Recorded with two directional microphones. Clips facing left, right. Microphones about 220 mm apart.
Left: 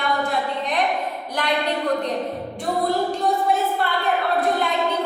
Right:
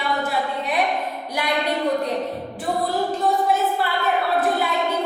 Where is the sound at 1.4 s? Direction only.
10° right (ahead or behind).